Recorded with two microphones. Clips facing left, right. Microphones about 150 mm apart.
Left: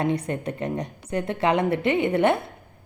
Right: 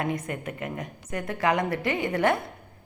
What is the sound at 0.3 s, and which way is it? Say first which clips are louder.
A woman's voice: left 5 dB; 30° left (ahead or behind).